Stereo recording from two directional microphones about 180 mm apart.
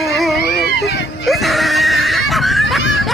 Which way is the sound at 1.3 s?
Centre (ahead or behind).